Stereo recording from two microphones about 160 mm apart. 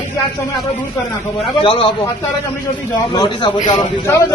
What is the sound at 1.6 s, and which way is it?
Speech, 35° left (ahead or behind).